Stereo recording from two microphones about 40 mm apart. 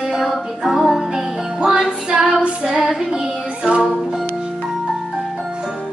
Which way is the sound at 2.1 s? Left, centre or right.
Centre.